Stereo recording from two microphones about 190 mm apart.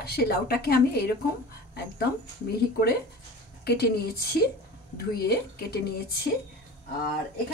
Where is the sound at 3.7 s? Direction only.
60° left (ahead or behind).